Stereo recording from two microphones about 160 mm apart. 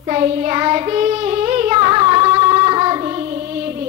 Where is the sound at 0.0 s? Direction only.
35° right (ahead or behind).